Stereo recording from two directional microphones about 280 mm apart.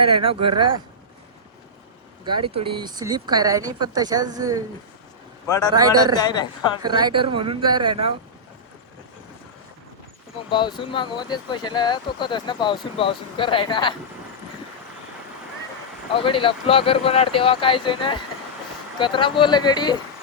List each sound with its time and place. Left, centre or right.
0.0 s speech: centre
2.2 s a woman's voice: centre
5.5 s speech: centre
5.7 s a woman's voice: centre
6.1 s speech: centre
6.8 s a woman's voice: centre
10.5 s speech: centre
16.1 s speech: centre